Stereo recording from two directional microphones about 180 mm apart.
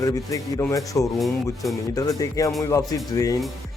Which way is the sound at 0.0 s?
20° left (ahead or behind).